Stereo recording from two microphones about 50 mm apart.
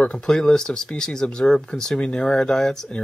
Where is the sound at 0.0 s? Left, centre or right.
Centre.